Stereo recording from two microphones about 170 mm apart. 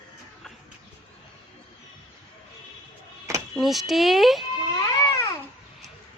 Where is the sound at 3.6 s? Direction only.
Centre (ahead or behind).